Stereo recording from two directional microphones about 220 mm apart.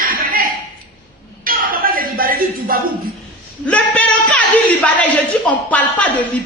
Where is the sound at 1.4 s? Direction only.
40° right (ahead or behind).